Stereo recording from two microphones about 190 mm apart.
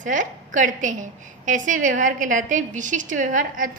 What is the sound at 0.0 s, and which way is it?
A woman's voice, 40° right (ahead or behind).